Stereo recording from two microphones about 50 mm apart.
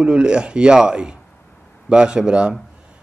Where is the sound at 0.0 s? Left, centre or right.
Centre.